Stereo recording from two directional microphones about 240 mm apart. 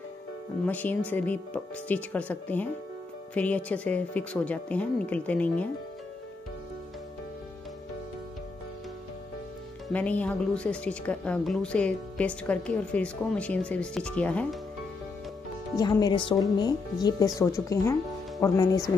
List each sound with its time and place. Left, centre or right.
0.7 s a woman's voice: centre
9.9 s a woman's voice: centre
15.7 s speech: centre